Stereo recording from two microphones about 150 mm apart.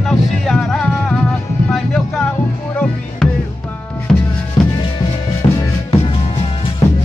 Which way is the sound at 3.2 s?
5° left (ahead or behind).